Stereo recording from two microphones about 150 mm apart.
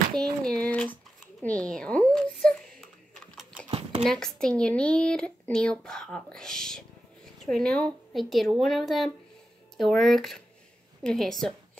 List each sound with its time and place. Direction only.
0.2 s speech: 5° left (ahead or behind)
1.4 s a sound: 10° left (ahead or behind)
4.0 s speech: 5° left (ahead or behind)